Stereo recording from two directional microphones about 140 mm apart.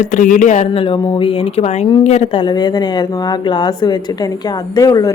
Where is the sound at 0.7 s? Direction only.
40° left (ahead or behind).